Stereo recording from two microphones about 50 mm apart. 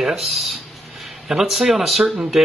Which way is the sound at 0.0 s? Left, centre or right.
Centre.